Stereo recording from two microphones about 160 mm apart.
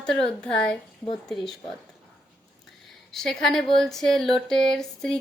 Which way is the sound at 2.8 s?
Centre (ahead or behind).